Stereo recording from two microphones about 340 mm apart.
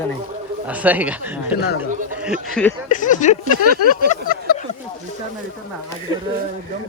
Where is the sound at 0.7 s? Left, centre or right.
Centre.